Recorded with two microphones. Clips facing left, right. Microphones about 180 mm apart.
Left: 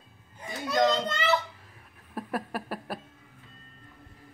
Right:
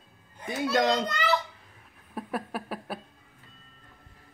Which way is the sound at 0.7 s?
25° left (ahead or behind).